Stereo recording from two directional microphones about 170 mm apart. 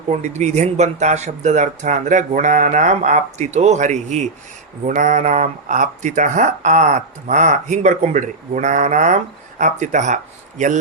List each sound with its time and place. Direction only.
0.1 s speech: 45° right (ahead or behind)